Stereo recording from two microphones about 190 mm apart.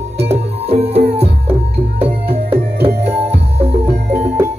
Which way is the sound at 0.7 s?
30° right (ahead or behind).